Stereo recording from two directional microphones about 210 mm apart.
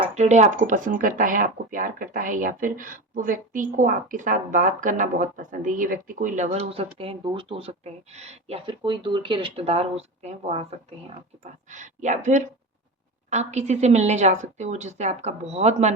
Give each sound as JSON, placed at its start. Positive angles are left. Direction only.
{"t": 0.0, "sound": "speech", "side_deg": -30}